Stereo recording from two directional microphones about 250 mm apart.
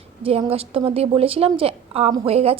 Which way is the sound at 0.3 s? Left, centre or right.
Right.